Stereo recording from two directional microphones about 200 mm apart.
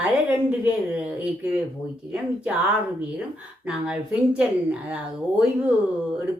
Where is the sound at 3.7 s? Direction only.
5° right (ahead or behind).